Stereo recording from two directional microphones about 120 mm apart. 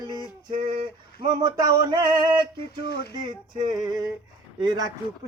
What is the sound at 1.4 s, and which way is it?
Speech, 30° right (ahead or behind).